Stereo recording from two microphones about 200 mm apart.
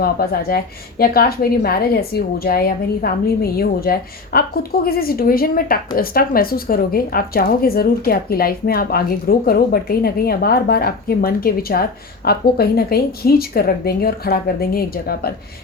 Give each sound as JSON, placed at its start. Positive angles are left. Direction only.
{"t": 0.0, "sound": "a woman's voice", "side_deg": 50}